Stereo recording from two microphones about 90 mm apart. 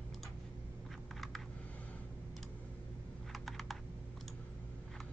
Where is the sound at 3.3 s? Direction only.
Centre (ahead or behind).